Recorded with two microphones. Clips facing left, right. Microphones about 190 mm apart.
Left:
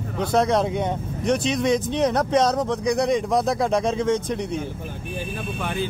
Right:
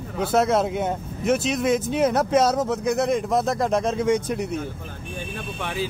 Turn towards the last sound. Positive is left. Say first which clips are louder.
# left 2 dB
turn(degrees=0)  # may be behind; listen again after turning